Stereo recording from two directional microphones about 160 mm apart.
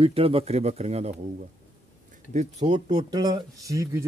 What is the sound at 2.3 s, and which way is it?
Speech, 45° right (ahead or behind).